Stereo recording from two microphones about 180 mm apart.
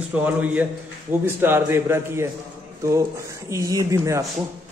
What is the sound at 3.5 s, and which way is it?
Speech, 15° right (ahead or behind).